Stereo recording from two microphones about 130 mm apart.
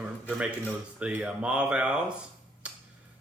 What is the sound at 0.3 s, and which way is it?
Speech, 10° right (ahead or behind).